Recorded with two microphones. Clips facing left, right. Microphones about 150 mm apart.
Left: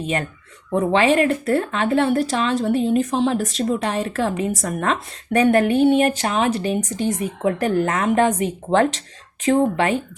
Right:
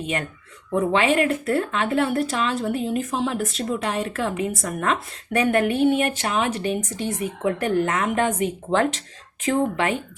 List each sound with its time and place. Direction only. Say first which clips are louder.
0.0 s speech: left 3 dB; 35° left (ahead or behind)